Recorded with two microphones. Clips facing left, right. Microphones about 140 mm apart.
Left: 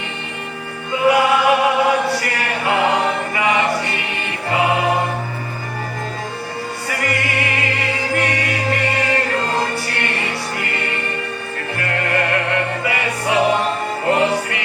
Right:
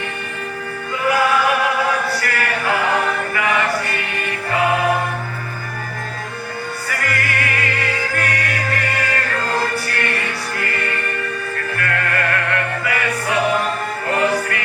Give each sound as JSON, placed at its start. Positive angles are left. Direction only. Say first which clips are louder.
{"t": 1.0, "sound": "choir", "louder": "left 3 dB", "side_deg": 25}
{"t": 6.8, "sound": "music", "louder": "left 2 dB", "side_deg": 25}